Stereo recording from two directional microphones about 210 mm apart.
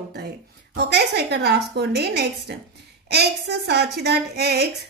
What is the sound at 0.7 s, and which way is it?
A woman's voice, 50° right (ahead or behind).